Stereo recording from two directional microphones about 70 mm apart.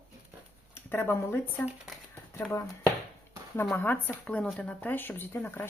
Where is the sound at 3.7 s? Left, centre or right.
Left.